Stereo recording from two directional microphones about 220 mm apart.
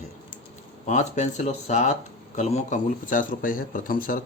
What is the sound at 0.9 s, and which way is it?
Speech, 30° left (ahead or behind).